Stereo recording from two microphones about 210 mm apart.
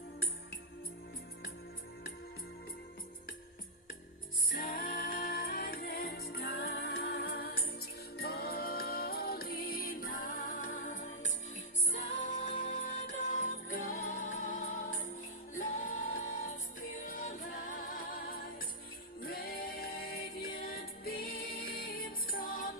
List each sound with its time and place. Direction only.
4.5 s music: 45° left (ahead or behind)